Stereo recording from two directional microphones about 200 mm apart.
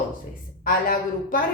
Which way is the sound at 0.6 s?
45° left (ahead or behind).